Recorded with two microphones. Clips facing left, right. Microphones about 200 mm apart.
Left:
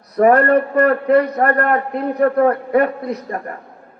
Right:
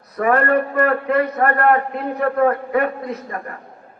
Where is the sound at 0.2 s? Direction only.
40° left (ahead or behind).